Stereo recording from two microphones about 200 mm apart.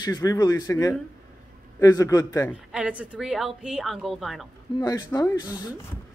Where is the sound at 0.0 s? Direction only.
20° left (ahead or behind).